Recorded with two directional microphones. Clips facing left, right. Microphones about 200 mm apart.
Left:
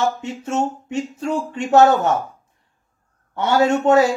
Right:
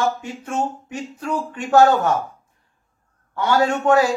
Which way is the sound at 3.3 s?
25° left (ahead or behind).